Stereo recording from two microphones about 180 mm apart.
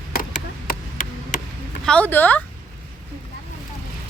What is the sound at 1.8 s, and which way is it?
Speech, 5° left (ahead or behind).